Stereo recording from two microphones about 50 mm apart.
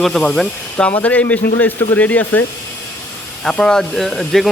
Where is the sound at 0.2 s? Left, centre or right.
Centre.